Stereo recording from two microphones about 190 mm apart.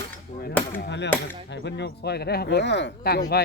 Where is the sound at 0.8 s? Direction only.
65° left (ahead or behind).